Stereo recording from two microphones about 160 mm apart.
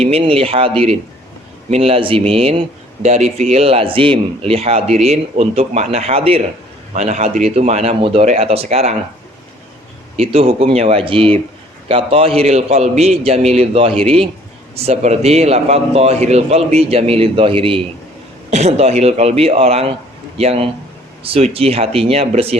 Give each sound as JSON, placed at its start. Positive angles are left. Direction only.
{"t": 0.0, "sound": "speech", "side_deg": -40}
{"t": 1.7, "sound": "speech", "side_deg": -35}
{"t": 10.2, "sound": "speech", "side_deg": -40}